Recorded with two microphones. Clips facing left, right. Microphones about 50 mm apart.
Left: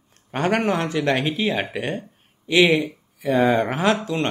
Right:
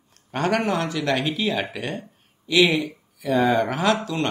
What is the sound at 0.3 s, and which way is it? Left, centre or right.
A man's voice, left.